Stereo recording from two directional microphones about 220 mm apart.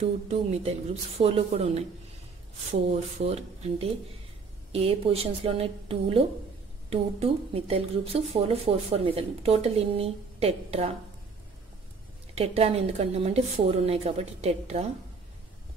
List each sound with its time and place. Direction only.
0.0 s speech: 30° right (ahead or behind)
12.4 s speech: 25° right (ahead or behind)